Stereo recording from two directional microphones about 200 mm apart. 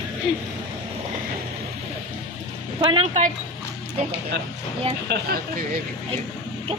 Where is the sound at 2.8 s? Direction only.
25° right (ahead or behind).